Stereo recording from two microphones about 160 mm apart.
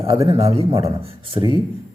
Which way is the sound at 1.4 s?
20° right (ahead or behind).